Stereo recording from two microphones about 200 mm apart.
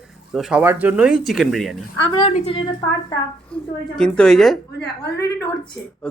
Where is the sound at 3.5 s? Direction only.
5° left (ahead or behind).